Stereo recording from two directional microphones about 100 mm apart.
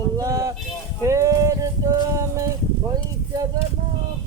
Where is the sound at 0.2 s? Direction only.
35° right (ahead or behind).